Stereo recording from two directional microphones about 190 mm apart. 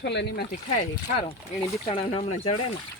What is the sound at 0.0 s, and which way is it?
Speech, 60° left (ahead or behind).